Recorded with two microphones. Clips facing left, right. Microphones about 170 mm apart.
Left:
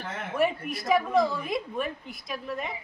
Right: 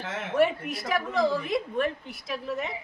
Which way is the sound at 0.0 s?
85° right.